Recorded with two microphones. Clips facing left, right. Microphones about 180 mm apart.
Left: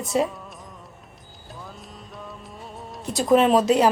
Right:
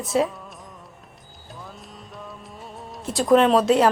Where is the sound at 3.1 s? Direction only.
Centre (ahead or behind).